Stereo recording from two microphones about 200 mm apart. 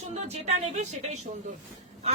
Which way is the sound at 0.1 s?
35° right (ahead or behind).